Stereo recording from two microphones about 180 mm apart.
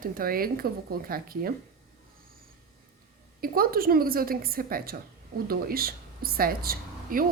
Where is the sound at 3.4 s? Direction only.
55° right (ahead or behind).